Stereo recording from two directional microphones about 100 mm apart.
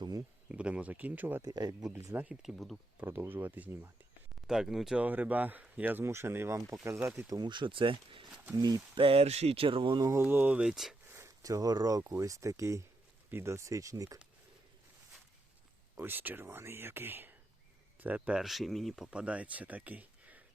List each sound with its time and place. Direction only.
0.4 s speech: 10° right (ahead or behind)
1.4 s speech: 40° right (ahead or behind)
1.9 s speech: 20° right (ahead or behind)
2.3 s speech: 5° right (ahead or behind)
3.0 s speech: 20° right (ahead or behind)
4.4 s speech: 5° right (ahead or behind)
5.0 s speech: 15° right (ahead or behind)
7.3 s speech: 45° right (ahead or behind); by 8.3 s 60° right (ahead or behind)
8.5 s speech: 40° right (ahead or behind)
9.0 s speech: 70° right (ahead or behind)
10.1 s speech: 20° right (ahead or behind); by 10.9 s 5° right (ahead or behind)
11.1 s speech: 30° right (ahead or behind)
16.0 s speech: 20° right (ahead or behind); by 19.2 s centre (ahead or behind)
19.2 s speech: 15° right (ahead or behind)